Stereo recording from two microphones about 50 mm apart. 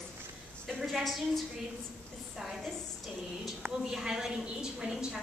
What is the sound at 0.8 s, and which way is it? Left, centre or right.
Speech, centre.